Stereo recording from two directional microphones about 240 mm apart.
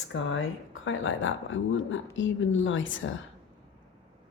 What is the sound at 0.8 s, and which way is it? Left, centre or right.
Speech, left.